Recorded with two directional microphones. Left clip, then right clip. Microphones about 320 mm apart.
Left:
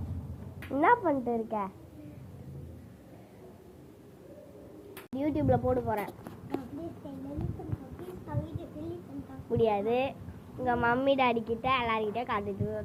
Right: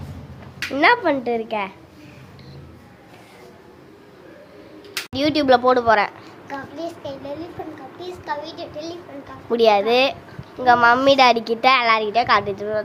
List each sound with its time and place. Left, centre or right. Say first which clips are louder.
0.7 s a woman's voice: right 9 dB; centre
5.1 s a woman's voice: right 13 dB; centre
9.5 s a woman's voice: right 12 dB; right